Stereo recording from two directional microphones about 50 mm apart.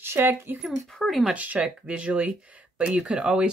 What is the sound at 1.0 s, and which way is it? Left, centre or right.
Speech, centre.